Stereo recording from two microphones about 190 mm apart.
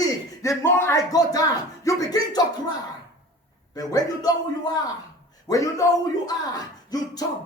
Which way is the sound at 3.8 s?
20° left (ahead or behind).